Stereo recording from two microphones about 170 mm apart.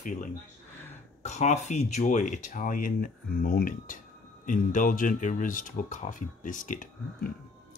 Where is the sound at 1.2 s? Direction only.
45° left (ahead or behind).